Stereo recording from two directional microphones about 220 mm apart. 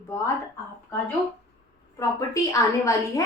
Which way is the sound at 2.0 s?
15° left (ahead or behind).